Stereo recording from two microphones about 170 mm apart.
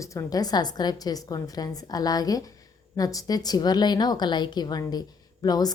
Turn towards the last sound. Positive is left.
turn(degrees=25)  # may be behind; listen again after turning